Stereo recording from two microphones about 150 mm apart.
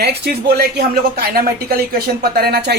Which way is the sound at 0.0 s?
90° right.